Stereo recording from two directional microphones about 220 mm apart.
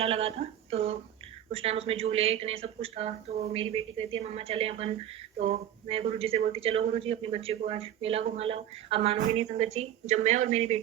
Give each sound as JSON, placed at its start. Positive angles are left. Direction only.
{"t": 0.0, "sound": "speech", "side_deg": -25}